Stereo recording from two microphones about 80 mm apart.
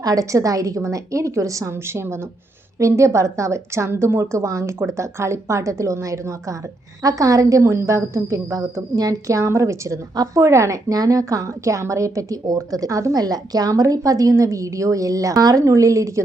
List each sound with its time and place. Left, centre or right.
0.0 s a woman's voice: right
13.1 s a woman's voice: right